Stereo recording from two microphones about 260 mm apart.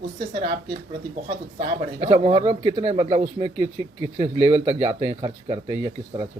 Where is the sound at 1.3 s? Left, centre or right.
Right.